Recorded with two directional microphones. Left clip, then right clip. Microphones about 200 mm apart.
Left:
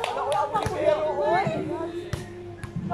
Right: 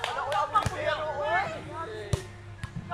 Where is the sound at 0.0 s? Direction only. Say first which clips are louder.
Left 3 dB; 15° left (ahead or behind).